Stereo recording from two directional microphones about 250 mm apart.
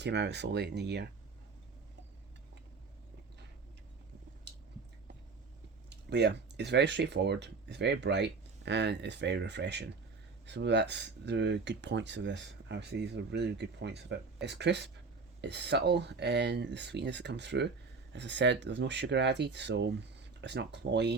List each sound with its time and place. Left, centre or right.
0.0 s speech: right
5.9 s speech: right